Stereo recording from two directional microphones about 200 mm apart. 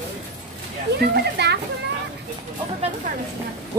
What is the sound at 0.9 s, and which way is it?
Speech, 55° right (ahead or behind).